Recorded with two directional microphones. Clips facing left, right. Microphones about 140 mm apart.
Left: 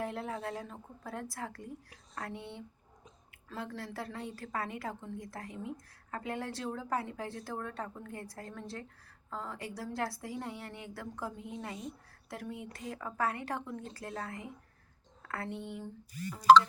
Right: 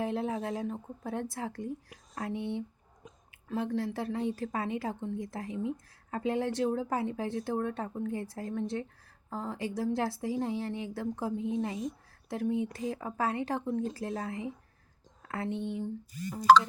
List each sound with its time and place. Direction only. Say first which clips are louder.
0.0 s speech: right 5 dB; 25° right (ahead or behind)